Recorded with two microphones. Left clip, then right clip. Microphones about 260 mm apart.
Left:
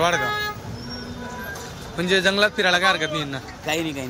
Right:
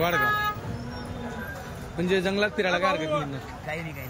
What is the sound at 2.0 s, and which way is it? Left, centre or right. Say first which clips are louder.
A man's voice: left 6 dB; centre.